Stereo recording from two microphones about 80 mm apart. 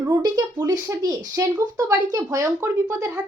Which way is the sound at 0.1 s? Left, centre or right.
Right.